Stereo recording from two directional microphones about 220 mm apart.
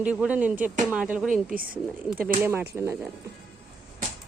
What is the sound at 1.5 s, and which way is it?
Speech, 40° right (ahead or behind).